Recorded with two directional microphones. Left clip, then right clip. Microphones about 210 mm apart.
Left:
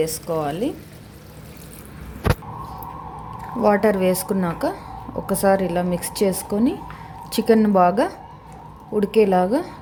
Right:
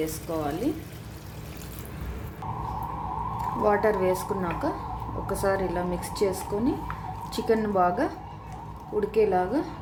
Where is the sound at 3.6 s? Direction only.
40° left (ahead or behind).